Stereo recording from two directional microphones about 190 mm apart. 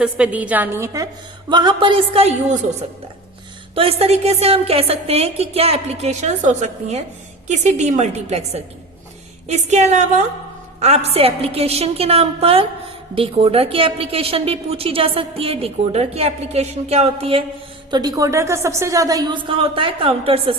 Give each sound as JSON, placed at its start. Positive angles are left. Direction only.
{"t": 0.0, "sound": "a woman's voice", "side_deg": -5}
{"t": 1.5, "sound": "a woman's voice", "side_deg": -25}
{"t": 3.8, "sound": "a woman's voice", "side_deg": -30}
{"t": 17.9, "sound": "a woman's voice", "side_deg": -20}